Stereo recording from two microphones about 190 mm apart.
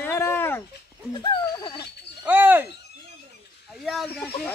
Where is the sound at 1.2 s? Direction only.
25° left (ahead or behind).